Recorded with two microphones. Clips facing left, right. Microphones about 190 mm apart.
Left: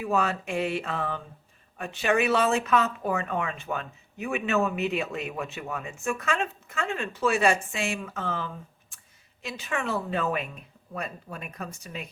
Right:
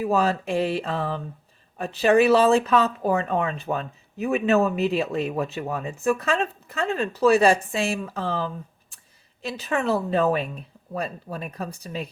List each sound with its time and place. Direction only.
0.0 s speech: 35° right (ahead or behind)